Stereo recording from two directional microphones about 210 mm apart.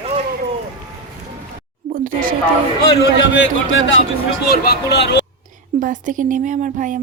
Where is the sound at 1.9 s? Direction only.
40° right (ahead or behind).